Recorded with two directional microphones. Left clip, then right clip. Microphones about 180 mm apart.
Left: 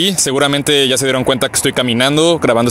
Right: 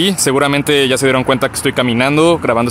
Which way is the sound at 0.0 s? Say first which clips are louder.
Right 1 dB; 40° left (ahead or behind).